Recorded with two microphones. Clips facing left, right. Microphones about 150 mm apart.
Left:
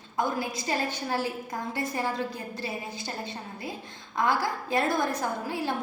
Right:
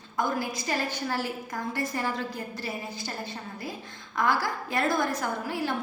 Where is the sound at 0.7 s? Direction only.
25° left (ahead or behind).